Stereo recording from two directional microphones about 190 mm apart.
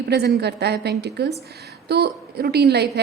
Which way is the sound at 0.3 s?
60° right (ahead or behind).